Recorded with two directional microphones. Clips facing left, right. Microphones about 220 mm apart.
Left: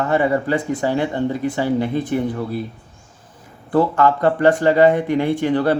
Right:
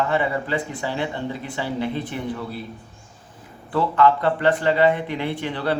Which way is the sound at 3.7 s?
45° left (ahead or behind).